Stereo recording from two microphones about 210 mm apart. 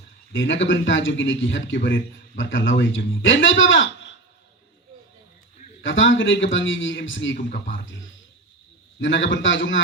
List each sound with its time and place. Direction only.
0.3 s speech: 60° left (ahead or behind)
5.8 s speech: 65° left (ahead or behind)
9.0 s speech: 60° left (ahead or behind)